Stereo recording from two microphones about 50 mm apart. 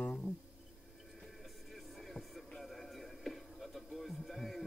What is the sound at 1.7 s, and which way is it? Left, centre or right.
Music, centre.